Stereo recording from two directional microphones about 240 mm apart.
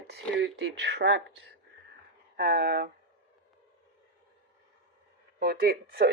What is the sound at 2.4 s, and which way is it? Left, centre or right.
Speech, right.